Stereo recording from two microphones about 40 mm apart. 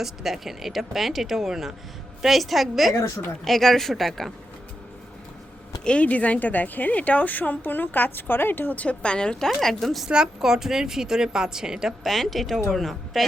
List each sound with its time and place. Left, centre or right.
0.0 s a woman's voice: centre
5.8 s speech: left
6.1 s a woman's voice: left
8.7 s a woman's voice: left
9.5 s speech: centre
10.1 s a woman's voice: centre
12.0 s speech: centre